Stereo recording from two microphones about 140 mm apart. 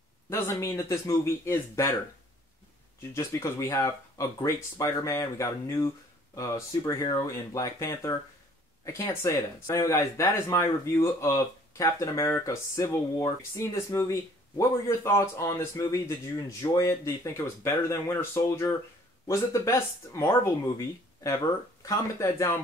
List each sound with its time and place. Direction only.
0.3 s speech: 20° left (ahead or behind)
3.2 s speech: 20° left (ahead or behind)